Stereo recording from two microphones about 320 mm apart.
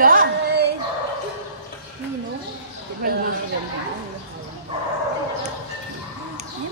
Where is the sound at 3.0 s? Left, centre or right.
Right.